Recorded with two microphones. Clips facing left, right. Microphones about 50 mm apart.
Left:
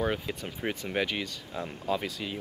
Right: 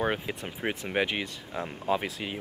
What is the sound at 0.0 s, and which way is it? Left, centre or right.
Speech, right.